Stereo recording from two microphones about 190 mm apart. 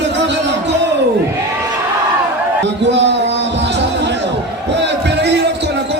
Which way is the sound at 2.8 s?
65° right (ahead or behind).